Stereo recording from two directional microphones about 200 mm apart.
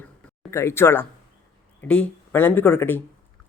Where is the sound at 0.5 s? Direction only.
10° left (ahead or behind).